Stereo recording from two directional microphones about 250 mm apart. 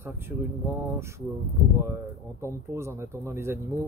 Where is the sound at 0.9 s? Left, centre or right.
Centre.